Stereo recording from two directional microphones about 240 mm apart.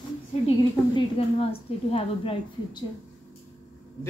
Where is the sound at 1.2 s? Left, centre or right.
Left.